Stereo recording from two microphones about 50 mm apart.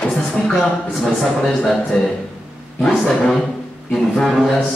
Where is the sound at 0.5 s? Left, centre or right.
Centre.